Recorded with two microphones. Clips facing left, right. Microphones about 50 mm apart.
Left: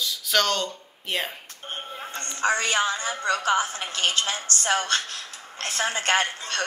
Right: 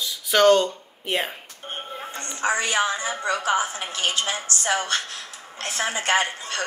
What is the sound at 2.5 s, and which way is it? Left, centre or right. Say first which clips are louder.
A woman's voice: right 2 dB; left.